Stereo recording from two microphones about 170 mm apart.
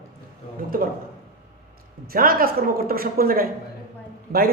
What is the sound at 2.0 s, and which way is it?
A man's voice, 60° right (ahead or behind).